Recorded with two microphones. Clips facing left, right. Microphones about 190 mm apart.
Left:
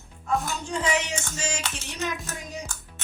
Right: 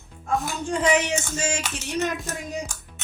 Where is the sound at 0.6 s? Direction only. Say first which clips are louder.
Right 8 dB; 55° right (ahead or behind).